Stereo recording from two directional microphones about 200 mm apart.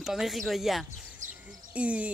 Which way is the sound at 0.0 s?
Centre (ahead or behind).